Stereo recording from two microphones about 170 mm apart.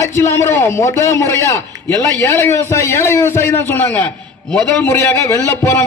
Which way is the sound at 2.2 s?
15° left (ahead or behind).